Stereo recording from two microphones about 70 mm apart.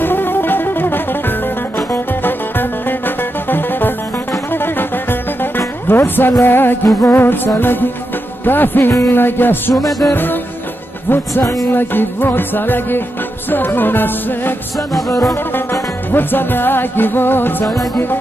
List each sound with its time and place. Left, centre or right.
0.0 s music: left
5.9 s speech: left
6.4 s music: left
9.8 s music: centre
10.1 s music: left
16.1 s music: left